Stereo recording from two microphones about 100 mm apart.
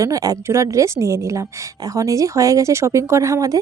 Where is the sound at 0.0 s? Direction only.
35° right (ahead or behind).